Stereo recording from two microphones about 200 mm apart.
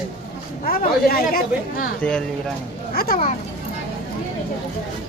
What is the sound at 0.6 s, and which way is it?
Speech, 50° left (ahead or behind).